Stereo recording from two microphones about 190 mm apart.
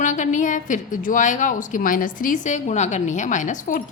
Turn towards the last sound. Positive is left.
turn(degrees=45)  # may be behind; listen again after turning